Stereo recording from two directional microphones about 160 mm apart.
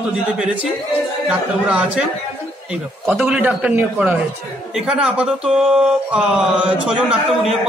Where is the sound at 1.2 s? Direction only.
5° right (ahead or behind).